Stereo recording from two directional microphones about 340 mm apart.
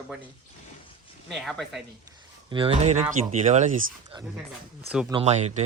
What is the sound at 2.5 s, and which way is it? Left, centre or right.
Speech, centre.